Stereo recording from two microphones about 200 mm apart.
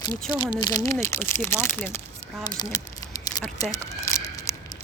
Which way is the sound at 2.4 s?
20° left (ahead or behind).